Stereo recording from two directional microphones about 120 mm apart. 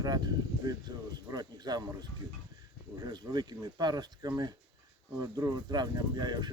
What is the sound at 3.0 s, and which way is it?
Speech, 35° right (ahead or behind).